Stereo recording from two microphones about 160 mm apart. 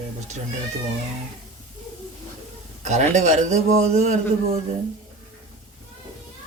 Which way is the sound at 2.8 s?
45° right (ahead or behind).